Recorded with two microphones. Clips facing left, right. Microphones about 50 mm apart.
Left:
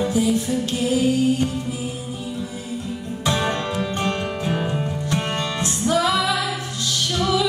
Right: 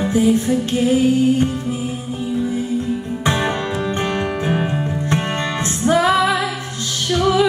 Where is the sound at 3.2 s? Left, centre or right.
Right.